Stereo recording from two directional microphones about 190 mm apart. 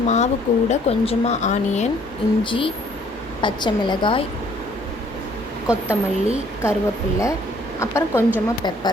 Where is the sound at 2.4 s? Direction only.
25° left (ahead or behind).